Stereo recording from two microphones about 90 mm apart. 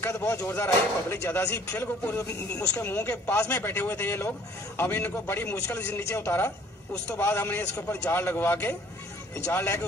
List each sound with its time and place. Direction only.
0.0 s speech: 30° left (ahead or behind)